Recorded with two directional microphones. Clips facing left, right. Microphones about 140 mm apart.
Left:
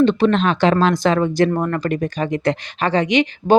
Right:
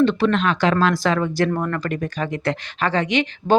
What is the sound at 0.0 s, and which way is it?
Speech, 20° left (ahead or behind).